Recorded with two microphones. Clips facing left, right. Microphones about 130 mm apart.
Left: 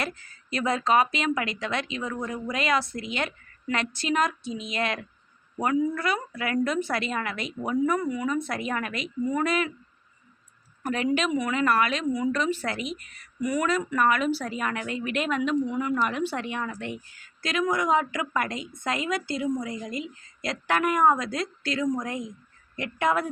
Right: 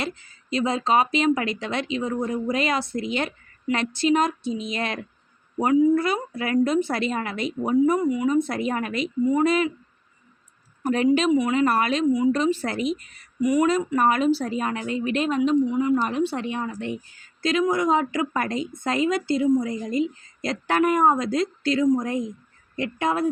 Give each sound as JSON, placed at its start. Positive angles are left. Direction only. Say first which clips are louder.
{"t": 0.0, "sound": "a woman's voice", "louder": "right 2 dB", "side_deg": -25}
{"t": 10.8, "sound": "a woman's voice", "louder": "right 5 dB", "side_deg": -35}
{"t": 11.3, "sound": "a woman's voice", "louder": "right 5 dB", "side_deg": -20}